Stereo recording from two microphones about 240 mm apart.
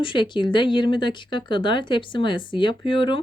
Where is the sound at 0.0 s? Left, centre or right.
Left.